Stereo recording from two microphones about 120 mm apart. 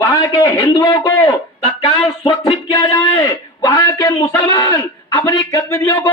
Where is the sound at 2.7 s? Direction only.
30° left (ahead or behind).